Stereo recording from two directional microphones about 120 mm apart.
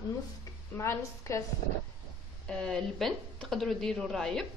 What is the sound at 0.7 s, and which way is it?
Speech, 25° left (ahead or behind).